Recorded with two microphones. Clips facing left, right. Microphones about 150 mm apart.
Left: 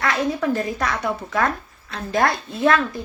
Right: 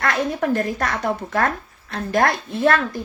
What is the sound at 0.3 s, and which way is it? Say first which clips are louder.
Speech: right 1 dB; 50° right (ahead or behind).